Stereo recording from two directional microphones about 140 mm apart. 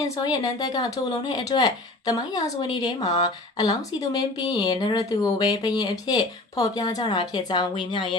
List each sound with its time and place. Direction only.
0.2 s speech: 30° left (ahead or behind)